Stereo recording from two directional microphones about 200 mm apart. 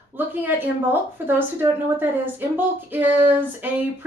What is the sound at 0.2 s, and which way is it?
A woman's voice, 10° right (ahead or behind).